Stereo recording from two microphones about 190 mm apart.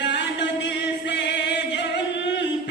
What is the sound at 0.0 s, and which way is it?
Music, 65° left (ahead or behind).